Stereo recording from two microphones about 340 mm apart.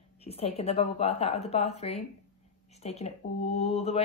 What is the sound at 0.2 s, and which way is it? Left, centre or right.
Speech, centre.